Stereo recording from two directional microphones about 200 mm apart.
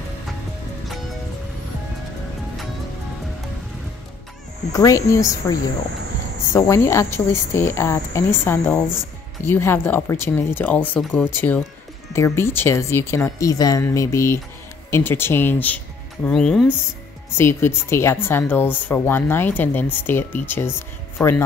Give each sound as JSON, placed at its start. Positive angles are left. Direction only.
{"t": 4.7, "sound": "speech", "side_deg": 15}
{"t": 17.4, "sound": "speech", "side_deg": 10}